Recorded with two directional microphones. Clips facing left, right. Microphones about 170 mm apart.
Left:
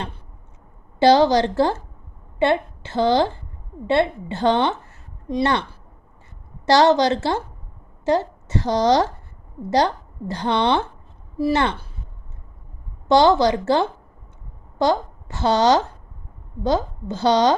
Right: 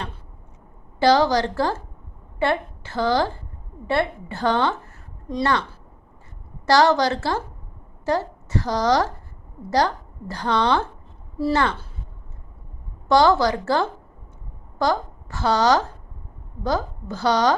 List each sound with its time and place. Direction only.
0.9 s a woman's voice: 25° left (ahead or behind)
6.7 s a woman's voice: 25° left (ahead or behind)
13.1 s a woman's voice: 25° left (ahead or behind)